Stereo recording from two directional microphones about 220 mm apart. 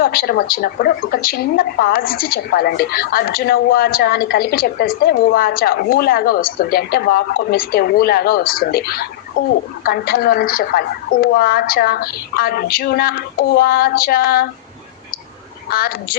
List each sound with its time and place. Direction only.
0.0 s a woman's voice: 45° left (ahead or behind)
15.7 s a woman's voice: 40° left (ahead or behind)